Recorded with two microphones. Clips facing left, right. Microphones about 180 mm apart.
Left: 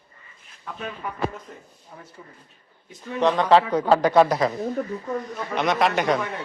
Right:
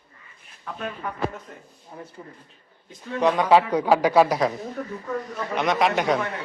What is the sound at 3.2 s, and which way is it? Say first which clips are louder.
A man's voice: even; 10° right (ahead or behind).